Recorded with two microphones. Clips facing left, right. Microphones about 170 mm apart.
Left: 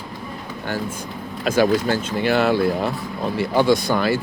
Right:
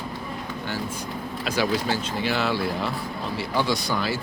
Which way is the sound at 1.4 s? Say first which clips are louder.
Left 7 dB; 50° left (ahead or behind).